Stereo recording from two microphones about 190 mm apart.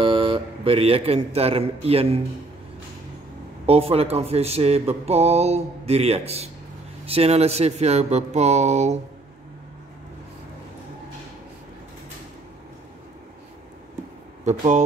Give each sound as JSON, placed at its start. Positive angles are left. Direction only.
{"t": 0.0, "sound": "a man's voice", "side_deg": -25}
{"t": 3.6, "sound": "speech", "side_deg": -30}
{"t": 14.4, "sound": "speech", "side_deg": -40}